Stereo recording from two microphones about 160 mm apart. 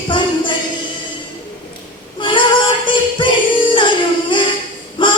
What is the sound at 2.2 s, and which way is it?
Female singing, 30° left (ahead or behind).